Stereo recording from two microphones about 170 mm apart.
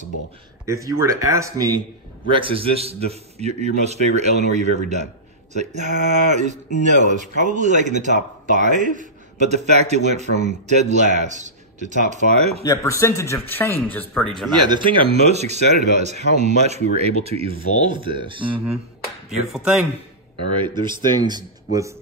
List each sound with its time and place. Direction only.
0.7 s speech: 20° right (ahead or behind)
2.2 s speech: 30° right (ahead or behind)
12.6 s speech: 20° left (ahead or behind); by 14.5 s 5° left (ahead or behind)
14.5 s speech: 25° right (ahead or behind)
19.2 s speech: 5° right (ahead or behind)
21.2 s speech: 25° right (ahead or behind)